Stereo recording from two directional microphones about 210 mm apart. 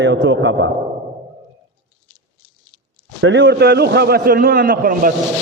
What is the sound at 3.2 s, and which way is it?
A man's voice, 60° right (ahead or behind).